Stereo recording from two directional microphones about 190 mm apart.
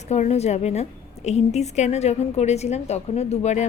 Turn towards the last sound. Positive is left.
turn(degrees=35)  # may be behind; listen again after turning